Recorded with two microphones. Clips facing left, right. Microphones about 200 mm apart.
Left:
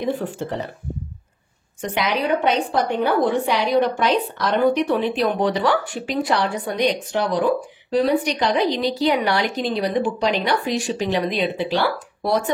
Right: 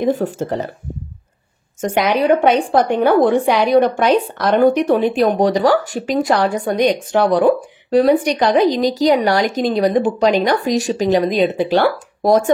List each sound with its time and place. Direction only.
0.0 s a woman's voice: 45° right (ahead or behind)
1.8 s a woman's voice: 45° right (ahead or behind)